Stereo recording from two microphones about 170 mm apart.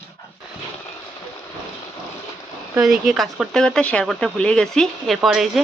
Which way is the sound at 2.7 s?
5° right (ahead or behind).